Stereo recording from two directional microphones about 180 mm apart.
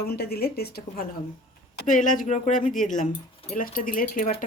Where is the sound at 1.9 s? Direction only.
45° left (ahead or behind).